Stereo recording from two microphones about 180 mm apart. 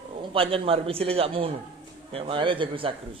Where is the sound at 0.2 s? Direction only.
30° right (ahead or behind).